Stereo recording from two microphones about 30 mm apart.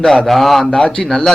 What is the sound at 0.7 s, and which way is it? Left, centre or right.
Speech, left.